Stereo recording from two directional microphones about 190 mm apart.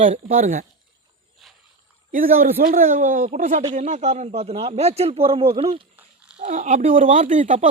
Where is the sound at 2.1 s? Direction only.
45° right (ahead or behind).